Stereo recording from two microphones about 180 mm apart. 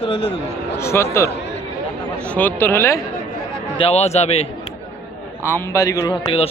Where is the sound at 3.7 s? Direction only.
35° left (ahead or behind).